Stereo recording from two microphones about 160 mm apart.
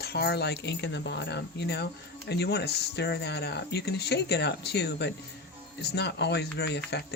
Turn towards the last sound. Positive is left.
turn(degrees=90)